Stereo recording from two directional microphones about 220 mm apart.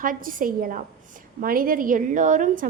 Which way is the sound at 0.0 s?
40° right (ahead or behind).